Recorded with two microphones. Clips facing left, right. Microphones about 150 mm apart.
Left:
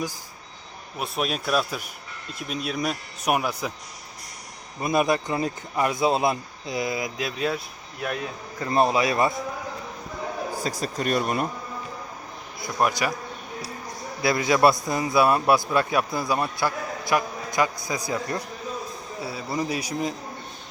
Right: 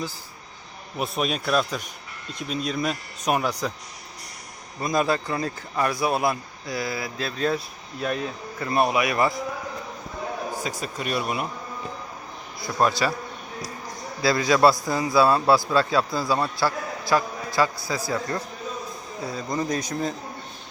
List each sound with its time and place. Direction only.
0.9 s speech: centre (ahead or behind)
4.8 s a man's voice: 15° left (ahead or behind)
8.6 s a man's voice: 30° left (ahead or behind)
10.6 s speech: 40° left (ahead or behind)
12.5 s a man's voice: 20° left (ahead or behind)
14.2 s a man's voice: 20° left (ahead or behind)
19.2 s speech: 5° left (ahead or behind)